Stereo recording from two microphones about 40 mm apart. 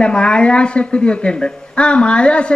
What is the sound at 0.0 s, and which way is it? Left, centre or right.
A man's voice, left.